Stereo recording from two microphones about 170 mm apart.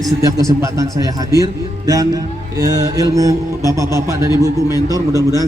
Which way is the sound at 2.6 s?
20° right (ahead or behind).